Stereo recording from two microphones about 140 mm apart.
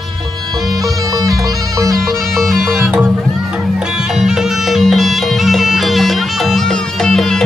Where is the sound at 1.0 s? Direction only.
25° right (ahead or behind).